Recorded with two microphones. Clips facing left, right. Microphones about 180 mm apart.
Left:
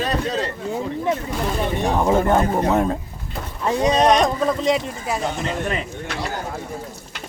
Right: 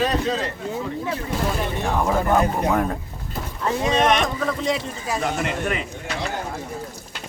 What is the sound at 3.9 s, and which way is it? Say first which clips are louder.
Speech: left 2 dB; 35° left (ahead or behind).